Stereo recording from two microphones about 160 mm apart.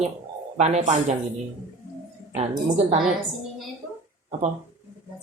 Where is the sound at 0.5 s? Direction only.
45° right (ahead or behind).